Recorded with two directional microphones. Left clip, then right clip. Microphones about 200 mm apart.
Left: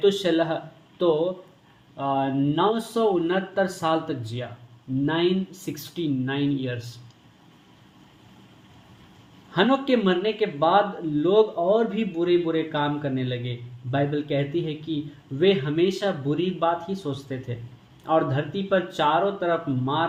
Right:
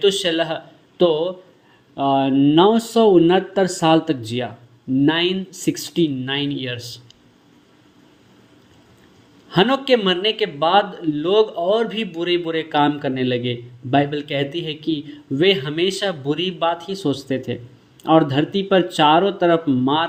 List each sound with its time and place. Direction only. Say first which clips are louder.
0.0 s a man's voice: right 3 dB; 40° right (ahead or behind)
9.5 s speech: right 5 dB; 45° right (ahead or behind)